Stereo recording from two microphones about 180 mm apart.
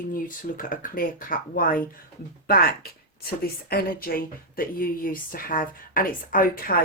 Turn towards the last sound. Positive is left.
turn(degrees=50)  # may be behind; listen again after turning